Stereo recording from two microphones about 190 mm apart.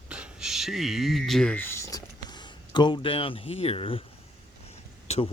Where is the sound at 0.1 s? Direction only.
5° right (ahead or behind); by 4.0 s 30° left (ahead or behind).